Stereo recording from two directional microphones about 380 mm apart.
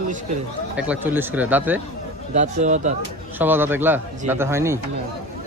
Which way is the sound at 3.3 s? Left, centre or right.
Centre.